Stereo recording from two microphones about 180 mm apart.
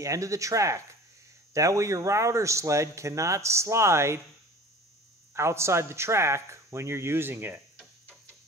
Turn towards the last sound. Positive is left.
turn(degrees=-10)  # may be behind; listen again after turning